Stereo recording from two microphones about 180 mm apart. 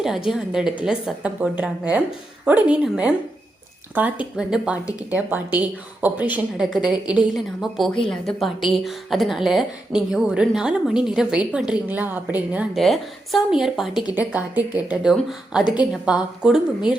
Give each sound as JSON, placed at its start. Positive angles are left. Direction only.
{"t": 0.0, "sound": "a woman's voice", "side_deg": 0}